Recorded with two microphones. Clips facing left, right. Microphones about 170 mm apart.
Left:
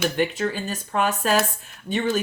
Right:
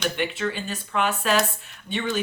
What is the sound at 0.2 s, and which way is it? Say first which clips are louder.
Speech: left 3 dB; 40° left (ahead or behind).